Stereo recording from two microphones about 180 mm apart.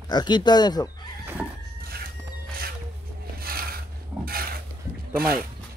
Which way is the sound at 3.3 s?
55° right (ahead or behind).